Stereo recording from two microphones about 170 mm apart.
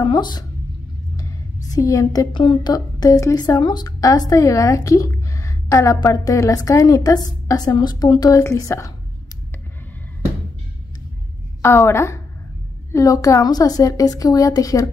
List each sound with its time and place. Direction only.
0.0 s a woman's voice: 25° left (ahead or behind)
11.6 s a woman's voice: 15° left (ahead or behind)